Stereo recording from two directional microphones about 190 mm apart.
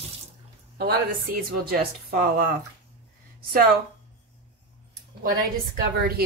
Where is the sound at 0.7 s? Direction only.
55° right (ahead or behind).